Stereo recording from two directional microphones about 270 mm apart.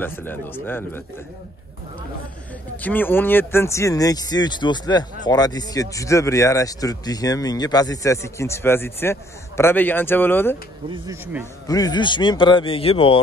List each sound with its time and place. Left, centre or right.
0.0 s speech: centre
2.8 s speech: centre
10.9 s speech: centre
11.6 s speech: centre